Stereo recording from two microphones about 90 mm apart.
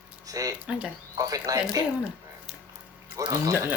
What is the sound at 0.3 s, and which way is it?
Speech, 40° right (ahead or behind).